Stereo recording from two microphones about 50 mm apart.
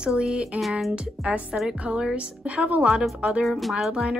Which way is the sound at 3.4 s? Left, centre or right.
Centre.